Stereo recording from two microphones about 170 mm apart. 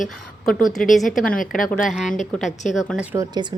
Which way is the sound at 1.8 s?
Centre (ahead or behind).